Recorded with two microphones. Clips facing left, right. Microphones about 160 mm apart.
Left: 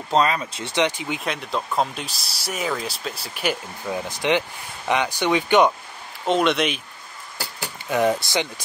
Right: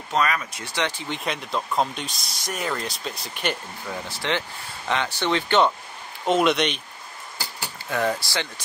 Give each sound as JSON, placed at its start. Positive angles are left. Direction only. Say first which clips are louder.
{"t": 0.1, "sound": "speech", "louder": "left 4 dB", "side_deg": 25}
{"t": 3.9, "sound": "speech", "louder": "left 6 dB", "side_deg": 15}
{"t": 6.2, "sound": "speech", "louder": "even", "side_deg": 0}
{"t": 7.9, "sound": "speech", "louder": "left 4 dB", "side_deg": 20}